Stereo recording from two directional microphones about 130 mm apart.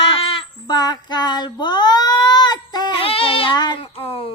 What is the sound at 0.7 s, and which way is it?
Child singing, 35° left (ahead or behind).